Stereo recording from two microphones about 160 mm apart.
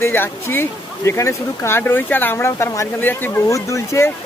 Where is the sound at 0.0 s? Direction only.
15° left (ahead or behind).